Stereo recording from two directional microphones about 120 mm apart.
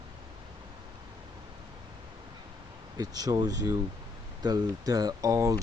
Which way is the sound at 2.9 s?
35° right (ahead or behind).